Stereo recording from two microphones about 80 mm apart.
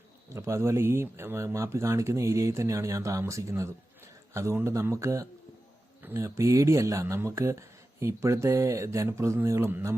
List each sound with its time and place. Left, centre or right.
0.3 s speech: right
6.0 s a sound: right
6.2 s speech: right